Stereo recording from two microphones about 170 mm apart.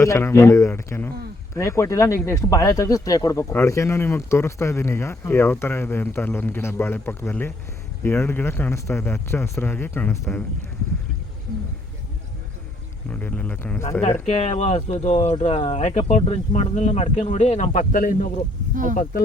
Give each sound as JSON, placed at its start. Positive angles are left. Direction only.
{"t": 0.0, "sound": "speech", "side_deg": 15}
{"t": 13.1, "sound": "speech", "side_deg": 10}
{"t": 14.3, "sound": "speech", "side_deg": 40}
{"t": 18.7, "sound": "speech", "side_deg": -50}